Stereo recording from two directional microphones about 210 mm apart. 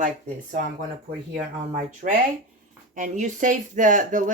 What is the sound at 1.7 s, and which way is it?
Speech, 35° right (ahead or behind).